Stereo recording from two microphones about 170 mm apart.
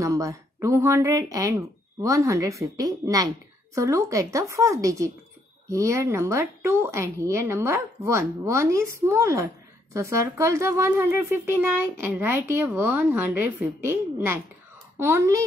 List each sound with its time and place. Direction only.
0.0 s a woman's voice: 20° right (ahead or behind)